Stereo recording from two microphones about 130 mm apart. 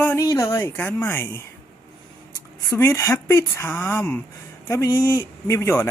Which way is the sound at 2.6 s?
20° left (ahead or behind).